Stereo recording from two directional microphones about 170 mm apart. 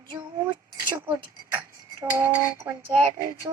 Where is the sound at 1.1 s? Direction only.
10° right (ahead or behind).